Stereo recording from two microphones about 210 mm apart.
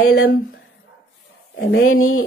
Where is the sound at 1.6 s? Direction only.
75° left (ahead or behind).